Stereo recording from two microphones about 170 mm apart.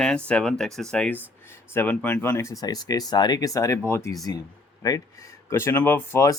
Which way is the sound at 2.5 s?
20° left (ahead or behind).